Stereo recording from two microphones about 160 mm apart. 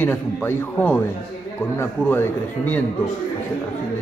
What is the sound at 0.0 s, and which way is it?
A man's voice, 10° left (ahead or behind).